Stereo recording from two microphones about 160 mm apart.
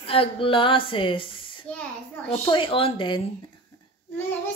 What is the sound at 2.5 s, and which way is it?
Speech, 35° left (ahead or behind).